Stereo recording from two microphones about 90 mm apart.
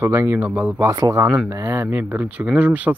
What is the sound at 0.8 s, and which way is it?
Speech, 40° right (ahead or behind).